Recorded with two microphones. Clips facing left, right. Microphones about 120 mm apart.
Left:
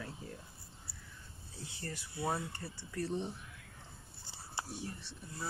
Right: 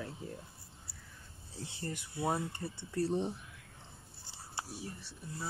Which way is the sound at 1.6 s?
20° right (ahead or behind).